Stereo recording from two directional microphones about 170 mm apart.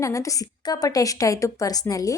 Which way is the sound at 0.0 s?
20° left (ahead or behind).